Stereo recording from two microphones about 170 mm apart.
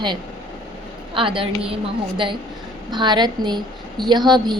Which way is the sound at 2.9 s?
25° right (ahead or behind).